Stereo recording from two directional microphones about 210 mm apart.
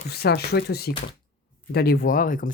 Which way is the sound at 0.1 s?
50° left (ahead or behind).